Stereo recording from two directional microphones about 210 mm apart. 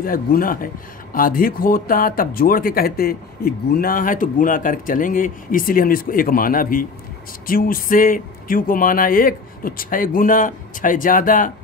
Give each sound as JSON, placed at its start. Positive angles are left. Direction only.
{"t": 0.0, "sound": "speech", "side_deg": 45}